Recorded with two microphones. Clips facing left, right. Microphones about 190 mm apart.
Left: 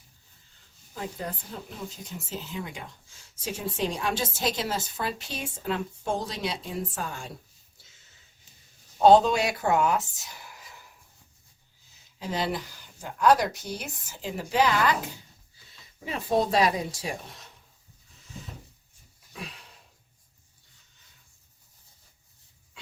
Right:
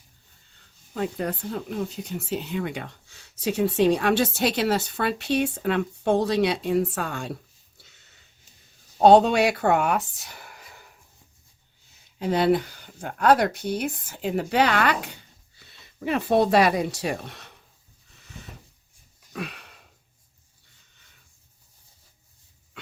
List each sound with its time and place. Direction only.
0.9 s speech: 70° right (ahead or behind)
7.8 s a sound: 65° right (ahead or behind)
9.0 s speech: 65° right (ahead or behind)
12.2 s speech: 60° right (ahead or behind)
19.3 s sniff: 65° right (ahead or behind)